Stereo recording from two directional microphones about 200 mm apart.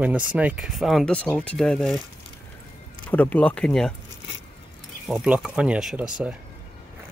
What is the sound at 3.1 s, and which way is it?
Speech, 10° left (ahead or behind).